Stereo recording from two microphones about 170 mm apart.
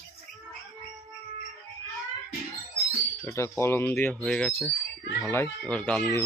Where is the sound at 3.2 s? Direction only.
15° left (ahead or behind).